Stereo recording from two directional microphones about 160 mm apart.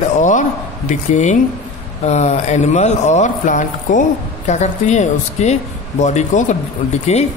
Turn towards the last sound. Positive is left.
turn(degrees=40)  # may be behind; listen again after turning